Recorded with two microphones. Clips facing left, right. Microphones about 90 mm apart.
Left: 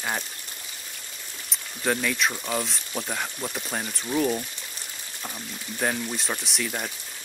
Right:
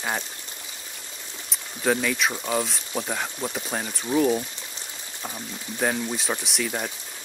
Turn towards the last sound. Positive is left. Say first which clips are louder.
# right 2 dB
turn(degrees=-5)  # may be behind; listen again after turning